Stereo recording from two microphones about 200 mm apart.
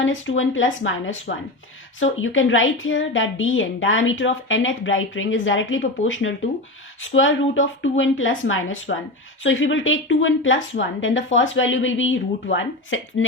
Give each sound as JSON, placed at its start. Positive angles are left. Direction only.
{"t": 0.0, "sound": "a woman's voice", "side_deg": 75}